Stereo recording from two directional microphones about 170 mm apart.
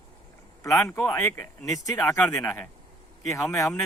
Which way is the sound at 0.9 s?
15° left (ahead or behind).